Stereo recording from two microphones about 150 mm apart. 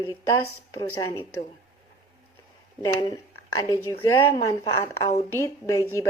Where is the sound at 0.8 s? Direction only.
20° left (ahead or behind).